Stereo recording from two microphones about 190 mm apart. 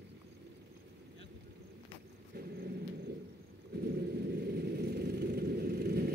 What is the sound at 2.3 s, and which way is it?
Dog, 55° right (ahead or behind).